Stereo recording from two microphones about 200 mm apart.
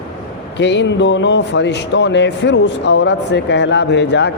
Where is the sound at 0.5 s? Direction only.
60° left (ahead or behind).